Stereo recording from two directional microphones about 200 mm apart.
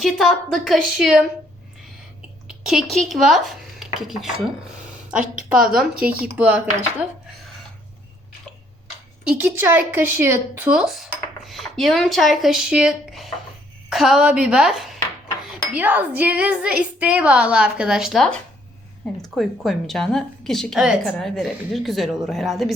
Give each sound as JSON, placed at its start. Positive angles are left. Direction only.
{"t": 0.0, "sound": "a woman's voice", "side_deg": 0}
{"t": 2.5, "sound": "speech", "side_deg": -5}
{"t": 5.1, "sound": "a woman's voice", "side_deg": -40}
{"t": 5.4, "sound": "a woman's voice", "side_deg": -5}
{"t": 9.2, "sound": "a woman's voice", "side_deg": -10}